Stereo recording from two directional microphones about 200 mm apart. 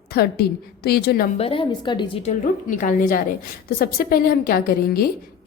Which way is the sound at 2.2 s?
40° left (ahead or behind).